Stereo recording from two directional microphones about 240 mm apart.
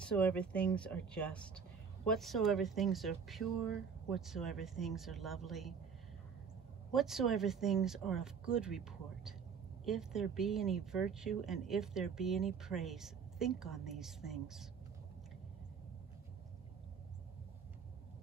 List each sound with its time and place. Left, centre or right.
0.0 s speech: centre
6.9 s speech: centre